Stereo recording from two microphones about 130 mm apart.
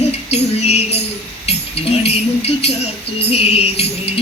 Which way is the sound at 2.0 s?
50° left (ahead or behind).